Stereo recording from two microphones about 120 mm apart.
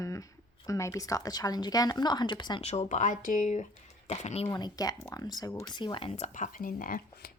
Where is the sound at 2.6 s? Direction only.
70° left (ahead or behind); by 3.6 s 90° left.